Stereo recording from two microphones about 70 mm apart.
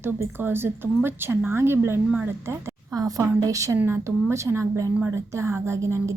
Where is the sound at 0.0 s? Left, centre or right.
Right.